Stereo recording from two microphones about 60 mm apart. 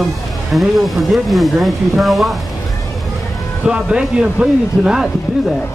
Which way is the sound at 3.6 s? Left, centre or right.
Centre.